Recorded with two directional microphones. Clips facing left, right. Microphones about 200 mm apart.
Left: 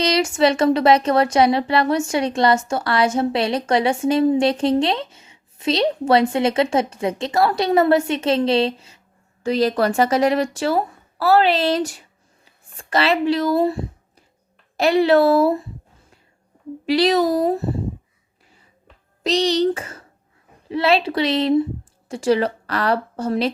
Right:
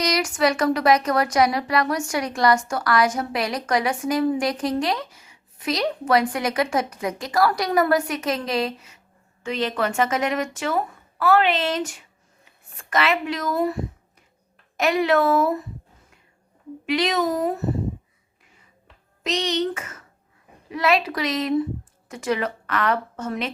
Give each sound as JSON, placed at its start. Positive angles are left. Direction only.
{"t": 0.0, "sound": "speech", "side_deg": 25}
{"t": 16.8, "sound": "speech", "side_deg": 35}
{"t": 19.2, "sound": "speech", "side_deg": 35}